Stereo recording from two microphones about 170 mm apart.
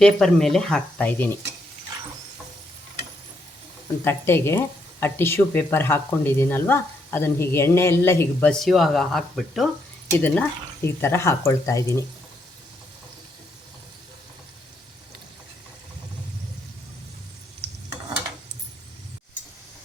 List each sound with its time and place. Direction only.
0.0 s speech: 5° left (ahead or behind)
4.0 s speech: 15° left (ahead or behind)
8.5 s speech: centre (ahead or behind); by 12.0 s 20° left (ahead or behind)